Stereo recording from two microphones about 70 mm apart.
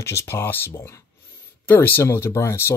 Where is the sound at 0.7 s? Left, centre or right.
Left.